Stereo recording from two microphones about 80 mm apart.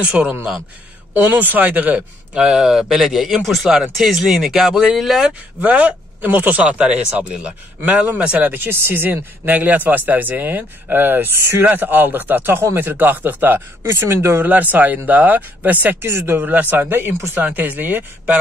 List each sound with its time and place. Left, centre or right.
0.0 s speech: centre
5.6 s speech: centre
8.5 s speech: right